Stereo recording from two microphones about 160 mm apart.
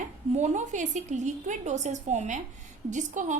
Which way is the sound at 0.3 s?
50° right (ahead or behind).